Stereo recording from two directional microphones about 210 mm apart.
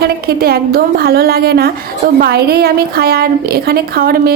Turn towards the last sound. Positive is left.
turn(degrees=-45)  # may be behind; listen again after turning